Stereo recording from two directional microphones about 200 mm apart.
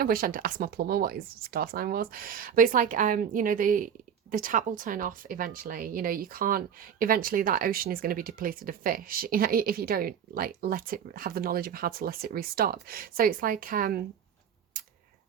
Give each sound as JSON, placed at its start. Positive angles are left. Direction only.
{"t": 0.0, "sound": "speech", "side_deg": -45}